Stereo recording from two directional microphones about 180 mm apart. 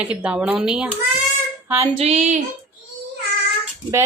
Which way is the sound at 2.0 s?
40° right (ahead or behind).